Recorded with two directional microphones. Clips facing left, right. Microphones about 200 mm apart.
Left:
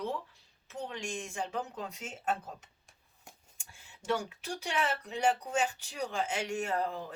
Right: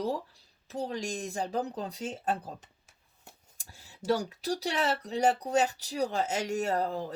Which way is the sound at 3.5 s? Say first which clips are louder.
Right 3 dB; 35° right (ahead or behind).